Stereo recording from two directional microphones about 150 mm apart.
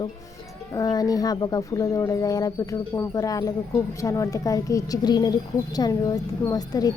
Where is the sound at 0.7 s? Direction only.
25° left (ahead or behind).